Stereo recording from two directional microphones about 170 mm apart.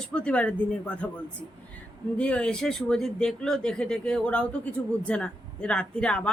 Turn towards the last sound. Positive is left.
turn(degrees=5)  # may be behind; listen again after turning